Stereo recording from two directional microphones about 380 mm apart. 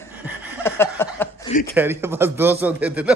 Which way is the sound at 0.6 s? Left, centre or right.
Centre.